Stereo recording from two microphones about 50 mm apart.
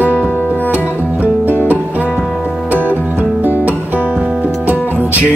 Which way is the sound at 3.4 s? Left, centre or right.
Right.